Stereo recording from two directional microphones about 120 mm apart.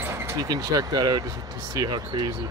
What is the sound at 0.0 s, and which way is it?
Speech, 20° right (ahead or behind).